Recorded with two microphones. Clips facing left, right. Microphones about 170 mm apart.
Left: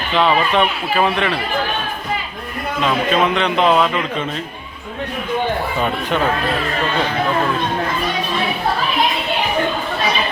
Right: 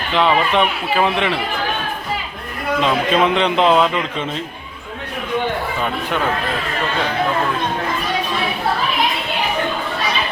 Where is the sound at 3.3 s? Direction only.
30° right (ahead or behind).